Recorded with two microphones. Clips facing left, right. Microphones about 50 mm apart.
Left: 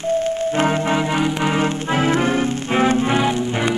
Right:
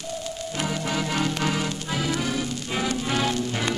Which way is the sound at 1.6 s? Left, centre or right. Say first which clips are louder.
Left 9 dB; left.